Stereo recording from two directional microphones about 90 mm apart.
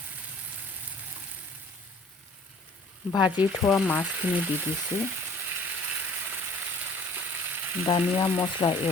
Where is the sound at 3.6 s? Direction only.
35° left (ahead or behind).